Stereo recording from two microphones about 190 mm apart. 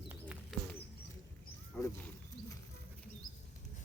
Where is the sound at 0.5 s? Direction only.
Centre (ahead or behind).